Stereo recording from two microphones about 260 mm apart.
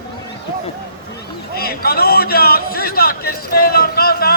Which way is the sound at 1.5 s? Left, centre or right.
Left.